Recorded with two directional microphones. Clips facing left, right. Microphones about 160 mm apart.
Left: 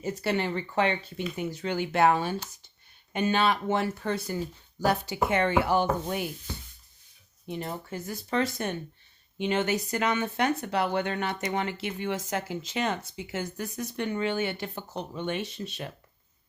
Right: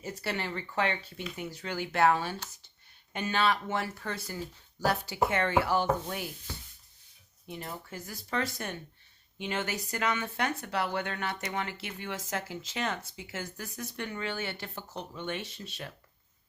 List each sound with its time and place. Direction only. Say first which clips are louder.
0.0 s speech: left 7 dB; 20° left (ahead or behind)
7.4 s speech: left 6 dB; 25° left (ahead or behind)